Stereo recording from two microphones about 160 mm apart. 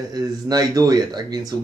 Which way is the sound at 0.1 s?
25° right (ahead or behind).